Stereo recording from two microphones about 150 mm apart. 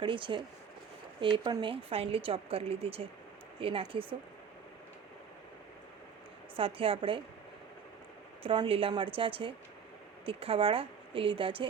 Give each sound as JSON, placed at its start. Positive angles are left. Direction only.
{"t": 0.0, "sound": "a woman's voice", "side_deg": -35}
{"t": 6.6, "sound": "a woman's voice", "side_deg": -40}
{"t": 8.4, "sound": "a woman's voice", "side_deg": -40}